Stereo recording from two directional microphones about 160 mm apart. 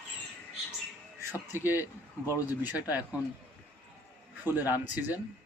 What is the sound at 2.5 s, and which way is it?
Speech, 10° right (ahead or behind).